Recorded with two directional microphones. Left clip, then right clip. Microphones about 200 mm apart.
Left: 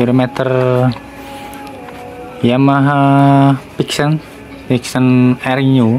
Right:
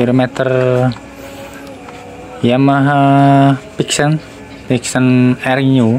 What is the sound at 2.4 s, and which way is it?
Speech, centre (ahead or behind).